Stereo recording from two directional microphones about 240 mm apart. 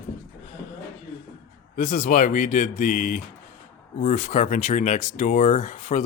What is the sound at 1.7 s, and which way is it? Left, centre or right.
Speech, left.